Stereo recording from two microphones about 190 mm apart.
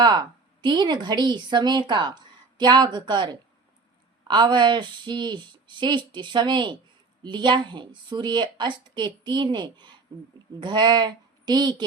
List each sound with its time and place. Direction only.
0.0 s speech: 25° right (ahead or behind)